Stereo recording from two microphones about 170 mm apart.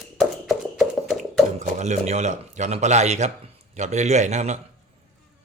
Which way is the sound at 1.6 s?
45° right (ahead or behind).